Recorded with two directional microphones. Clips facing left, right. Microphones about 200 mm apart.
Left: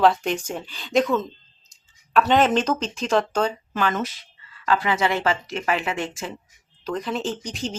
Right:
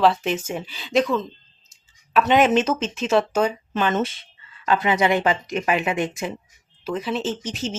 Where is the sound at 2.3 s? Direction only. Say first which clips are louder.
Right 3 dB; 5° right (ahead or behind).